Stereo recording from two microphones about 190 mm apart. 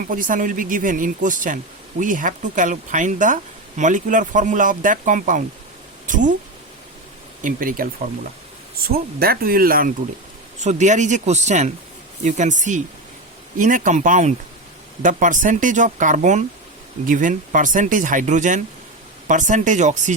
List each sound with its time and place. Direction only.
0.1 s speech: 45° right (ahead or behind)
7.4 s speech: 45° right (ahead or behind)
8.9 s speech: 55° right (ahead or behind)
10.6 s speech: 40° right (ahead or behind)